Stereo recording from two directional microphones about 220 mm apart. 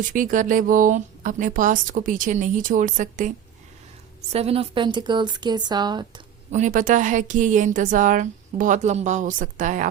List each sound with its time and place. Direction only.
0.0 s speech: 35° right (ahead or behind); by 6.2 s 20° right (ahead or behind)
6.5 s speech: 35° right (ahead or behind)